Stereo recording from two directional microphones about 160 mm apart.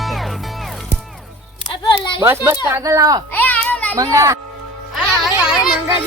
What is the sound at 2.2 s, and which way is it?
Speech, 15° right (ahead or behind).